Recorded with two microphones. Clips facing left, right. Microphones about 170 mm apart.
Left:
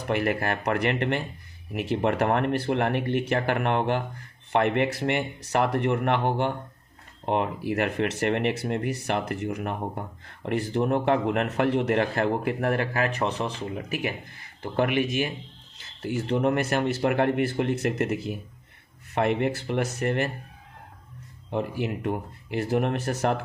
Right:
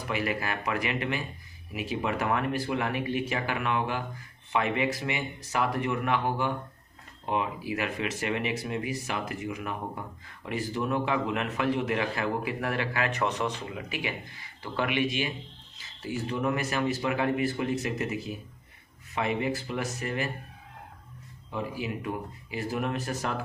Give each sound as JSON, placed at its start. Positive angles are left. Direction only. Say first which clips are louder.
{"t": 0.1, "sound": "a man's voice", "louder": "left 5 dB", "side_deg": 55}
{"t": 16.0, "sound": "speech", "louder": "left 5 dB", "side_deg": 65}
{"t": 21.5, "sound": "speech", "louder": "left 5 dB", "side_deg": 60}